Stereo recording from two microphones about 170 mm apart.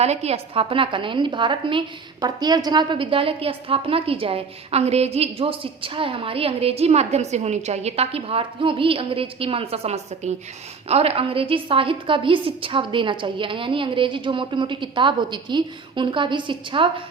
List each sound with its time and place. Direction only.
0.0 s a woman's voice: 40° right (ahead or behind)